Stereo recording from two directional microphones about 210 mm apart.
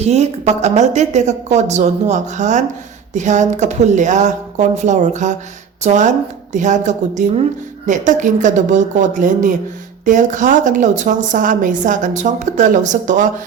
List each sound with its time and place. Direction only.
0.0 s a woman's voice: 30° right (ahead or behind)